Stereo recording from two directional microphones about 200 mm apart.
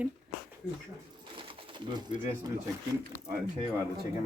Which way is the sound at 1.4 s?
25° right (ahead or behind).